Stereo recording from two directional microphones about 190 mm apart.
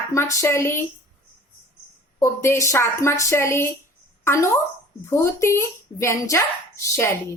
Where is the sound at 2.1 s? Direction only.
15° left (ahead or behind).